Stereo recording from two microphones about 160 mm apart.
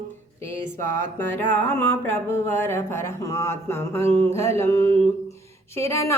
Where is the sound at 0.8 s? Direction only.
15° left (ahead or behind).